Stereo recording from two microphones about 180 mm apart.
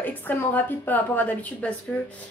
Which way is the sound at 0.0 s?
10° left (ahead or behind).